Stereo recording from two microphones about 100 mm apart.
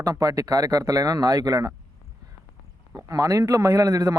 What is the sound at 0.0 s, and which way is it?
A man's voice, 35° right (ahead or behind).